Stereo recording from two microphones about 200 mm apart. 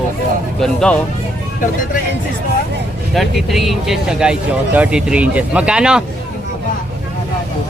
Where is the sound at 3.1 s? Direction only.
Centre (ahead or behind).